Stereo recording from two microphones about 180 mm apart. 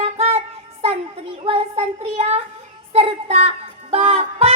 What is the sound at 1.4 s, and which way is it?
A child's voice, 30° right (ahead or behind).